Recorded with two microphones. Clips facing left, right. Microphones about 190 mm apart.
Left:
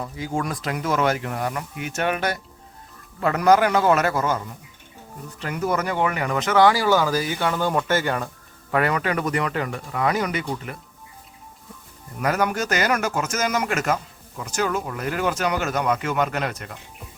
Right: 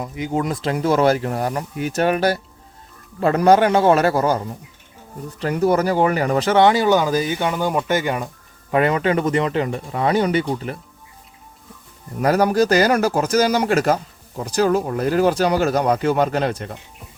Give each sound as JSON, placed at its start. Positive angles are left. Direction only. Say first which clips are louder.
{"t": 0.0, "sound": "speech", "louder": "right 4 dB", "side_deg": -20}
{"t": 12.2, "sound": "speech", "louder": "right 7 dB", "side_deg": -35}